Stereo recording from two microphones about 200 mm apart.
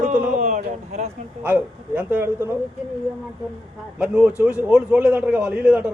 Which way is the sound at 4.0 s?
5° right (ahead or behind).